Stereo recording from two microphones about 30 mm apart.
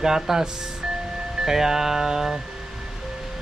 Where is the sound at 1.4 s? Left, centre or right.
Centre.